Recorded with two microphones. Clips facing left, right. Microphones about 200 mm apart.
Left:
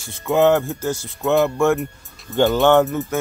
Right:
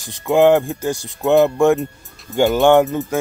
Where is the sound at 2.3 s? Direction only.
Centre (ahead or behind).